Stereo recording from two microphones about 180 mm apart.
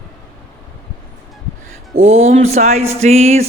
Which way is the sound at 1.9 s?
35° right (ahead or behind).